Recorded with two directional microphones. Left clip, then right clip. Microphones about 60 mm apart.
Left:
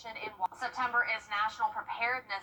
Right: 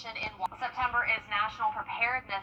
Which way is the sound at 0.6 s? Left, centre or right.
Left.